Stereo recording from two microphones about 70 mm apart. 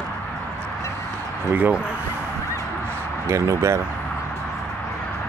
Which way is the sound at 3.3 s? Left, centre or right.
Right.